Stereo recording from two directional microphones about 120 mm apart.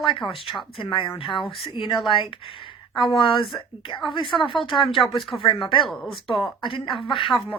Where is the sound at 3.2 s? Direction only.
45° left (ahead or behind).